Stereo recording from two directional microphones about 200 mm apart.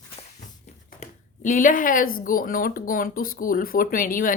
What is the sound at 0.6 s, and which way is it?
Speech, 40° left (ahead or behind).